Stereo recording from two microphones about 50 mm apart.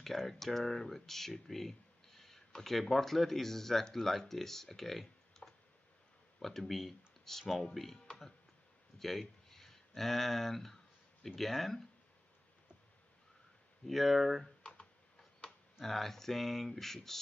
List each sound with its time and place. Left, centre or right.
0.0 s speech: centre
9.5 s speech: centre
13.8 s speech: centre
14.6 s computer keyboard: centre
15.8 s speech: centre